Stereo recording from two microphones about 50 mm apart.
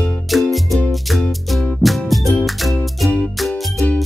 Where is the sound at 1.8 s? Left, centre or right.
Centre.